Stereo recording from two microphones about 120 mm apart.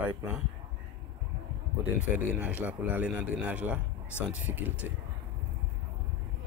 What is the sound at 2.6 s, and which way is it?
Speech, 15° right (ahead or behind).